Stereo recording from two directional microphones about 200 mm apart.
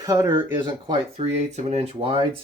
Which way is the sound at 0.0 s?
15° right (ahead or behind).